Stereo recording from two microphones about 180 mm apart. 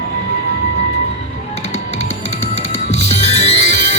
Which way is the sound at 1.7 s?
35° left (ahead or behind).